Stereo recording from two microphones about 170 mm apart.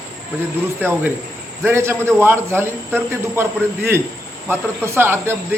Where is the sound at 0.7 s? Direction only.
10° right (ahead or behind).